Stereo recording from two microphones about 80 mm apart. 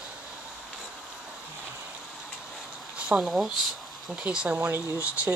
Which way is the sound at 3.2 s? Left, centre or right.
Centre.